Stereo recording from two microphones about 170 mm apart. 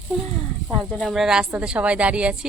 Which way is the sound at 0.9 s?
Centre (ahead or behind).